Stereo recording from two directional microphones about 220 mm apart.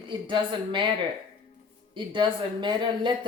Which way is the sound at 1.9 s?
20° right (ahead or behind).